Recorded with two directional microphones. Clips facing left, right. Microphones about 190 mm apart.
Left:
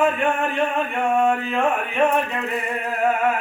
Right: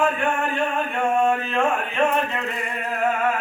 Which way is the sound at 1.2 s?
15° left (ahead or behind).